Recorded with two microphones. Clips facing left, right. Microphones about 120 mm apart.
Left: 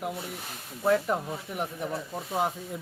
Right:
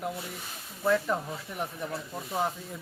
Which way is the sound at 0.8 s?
20° left (ahead or behind).